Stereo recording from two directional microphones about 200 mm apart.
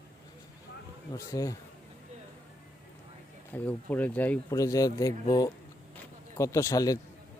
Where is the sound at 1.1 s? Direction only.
15° left (ahead or behind).